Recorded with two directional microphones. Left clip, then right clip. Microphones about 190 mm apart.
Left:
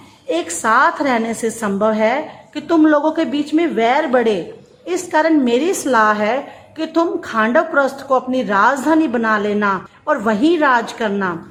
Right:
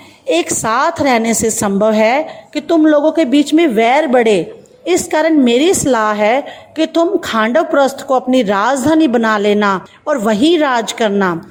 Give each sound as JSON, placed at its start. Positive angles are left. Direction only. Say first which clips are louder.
{"t": 0.3, "sound": "a woman's voice", "louder": "right 3 dB", "side_deg": -30}
{"t": 2.6, "sound": "a woman's voice", "louder": "right 3 dB", "side_deg": -20}